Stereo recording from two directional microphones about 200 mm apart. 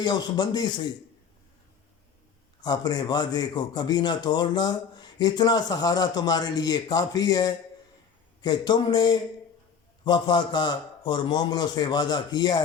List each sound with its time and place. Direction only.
0.0 s a man's voice: 20° left (ahead or behind)
2.6 s a man's voice: 20° left (ahead or behind)